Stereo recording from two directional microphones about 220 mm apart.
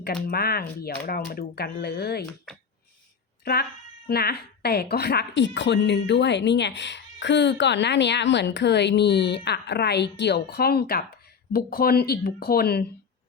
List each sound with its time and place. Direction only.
0.0 s a woman's voice: 45° left (ahead or behind)
3.4 s a woman's voice: 45° left (ahead or behind)